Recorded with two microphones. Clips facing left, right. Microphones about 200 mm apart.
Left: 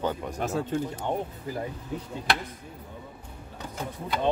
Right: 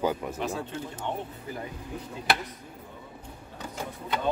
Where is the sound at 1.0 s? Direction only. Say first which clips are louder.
Left 2 dB; 40° left (ahead or behind).